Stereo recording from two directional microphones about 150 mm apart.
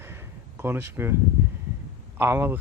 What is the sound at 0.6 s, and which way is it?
Speech, 15° right (ahead or behind).